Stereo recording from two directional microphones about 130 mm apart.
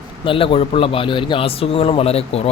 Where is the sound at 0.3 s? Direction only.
45° left (ahead or behind).